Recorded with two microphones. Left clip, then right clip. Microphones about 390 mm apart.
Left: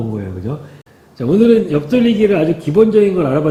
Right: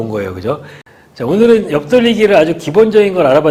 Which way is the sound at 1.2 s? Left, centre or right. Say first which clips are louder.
Right 2 dB; right.